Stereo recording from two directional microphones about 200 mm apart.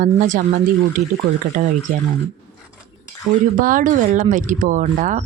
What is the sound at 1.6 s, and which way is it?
Speech, 40° right (ahead or behind).